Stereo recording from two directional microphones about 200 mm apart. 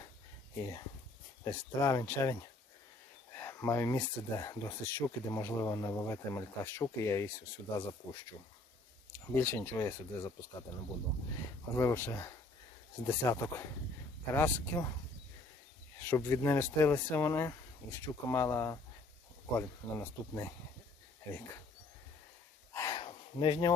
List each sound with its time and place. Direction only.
1.5 s speech: 15° left (ahead or behind)
9.3 s speech: 10° left (ahead or behind)
11.7 s speech: 15° left (ahead or behind)
16.0 s speech: 10° left (ahead or behind)
22.7 s a sound: 15° left (ahead or behind)
23.0 s a sound: 25° left (ahead or behind)